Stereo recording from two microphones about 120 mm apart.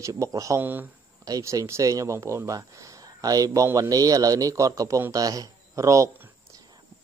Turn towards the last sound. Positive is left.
turn(degrees=-25)  # may be behind; listen again after turning